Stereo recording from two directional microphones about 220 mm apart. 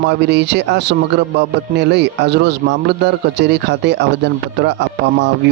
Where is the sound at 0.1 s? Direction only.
50° right (ahead or behind).